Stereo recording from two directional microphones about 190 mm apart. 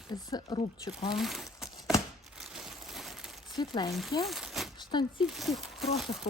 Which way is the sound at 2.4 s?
Centre (ahead or behind).